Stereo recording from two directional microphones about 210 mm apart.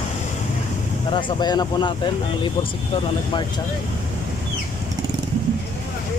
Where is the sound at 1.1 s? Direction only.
20° left (ahead or behind).